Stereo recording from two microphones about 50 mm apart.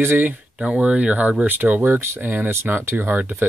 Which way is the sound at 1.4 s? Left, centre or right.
Right.